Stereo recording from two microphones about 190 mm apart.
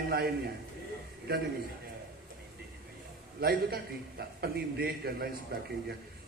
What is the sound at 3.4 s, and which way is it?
A man's voice, 55° right (ahead or behind).